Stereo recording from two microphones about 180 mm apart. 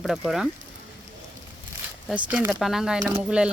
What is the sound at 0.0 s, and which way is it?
Speech, centre (ahead or behind).